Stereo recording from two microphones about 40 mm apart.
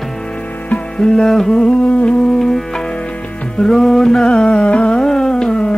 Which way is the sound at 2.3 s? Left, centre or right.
Centre.